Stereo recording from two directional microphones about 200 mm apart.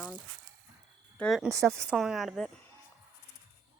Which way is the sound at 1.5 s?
15° right (ahead or behind).